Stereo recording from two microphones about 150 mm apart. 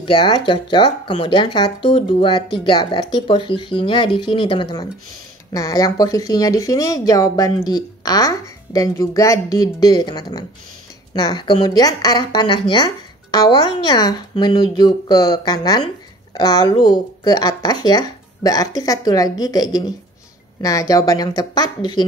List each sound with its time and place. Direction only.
0.0 s a woman's voice: 35° left (ahead or behind)